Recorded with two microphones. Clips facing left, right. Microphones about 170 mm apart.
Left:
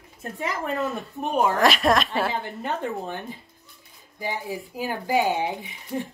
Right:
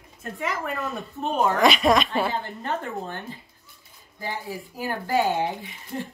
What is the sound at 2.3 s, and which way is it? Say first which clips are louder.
Speech: even; 15° left (ahead or behind).